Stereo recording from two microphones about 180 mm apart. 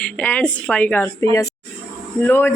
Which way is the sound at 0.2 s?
10° left (ahead or behind).